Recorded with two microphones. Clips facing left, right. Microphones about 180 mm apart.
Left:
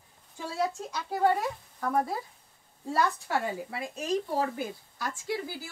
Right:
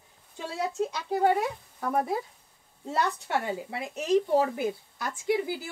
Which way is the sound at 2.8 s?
20° right (ahead or behind).